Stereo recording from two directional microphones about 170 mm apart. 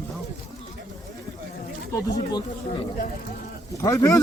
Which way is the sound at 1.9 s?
25° left (ahead or behind).